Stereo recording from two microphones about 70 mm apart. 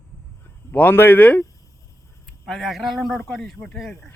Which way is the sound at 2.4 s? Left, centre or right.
Centre.